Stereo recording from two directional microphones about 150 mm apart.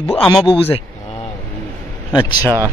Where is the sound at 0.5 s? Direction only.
40° left (ahead or behind).